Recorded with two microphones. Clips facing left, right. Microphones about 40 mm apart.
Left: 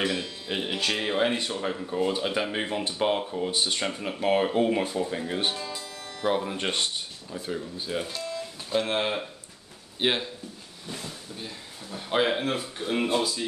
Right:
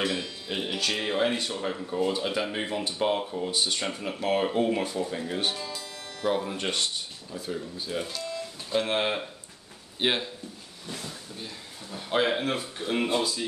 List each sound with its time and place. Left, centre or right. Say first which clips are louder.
0.2 s speech: left 1 dB; centre
5.6 s speech: left 1 dB; centre
6.2 s speech: left 1 dB; left
8.2 s music: left 1 dB; centre
8.8 s speech: even; centre